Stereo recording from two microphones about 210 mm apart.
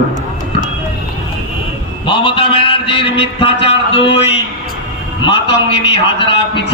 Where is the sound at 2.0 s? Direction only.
25° left (ahead or behind).